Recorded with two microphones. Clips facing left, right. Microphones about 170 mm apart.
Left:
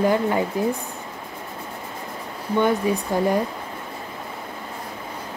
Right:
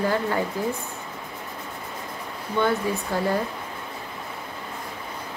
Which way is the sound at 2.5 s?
15° left (ahead or behind).